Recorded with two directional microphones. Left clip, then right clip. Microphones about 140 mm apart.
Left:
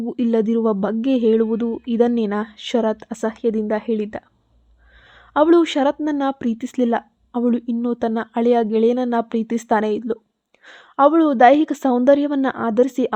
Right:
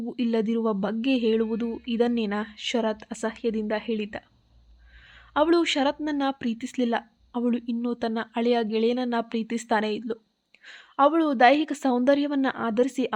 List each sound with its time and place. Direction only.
0.0 s speech: 45° left (ahead or behind)
5.3 s speech: 50° left (ahead or behind)
5.8 s speech: 35° left (ahead or behind); by 13.1 s 50° left (ahead or behind)